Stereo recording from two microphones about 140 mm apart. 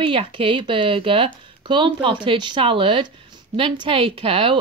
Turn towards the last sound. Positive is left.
turn(degrees=-40)  # may be behind; listen again after turning